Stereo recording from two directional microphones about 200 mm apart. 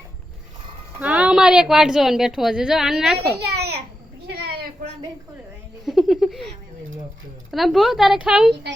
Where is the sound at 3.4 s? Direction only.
55° right (ahead or behind).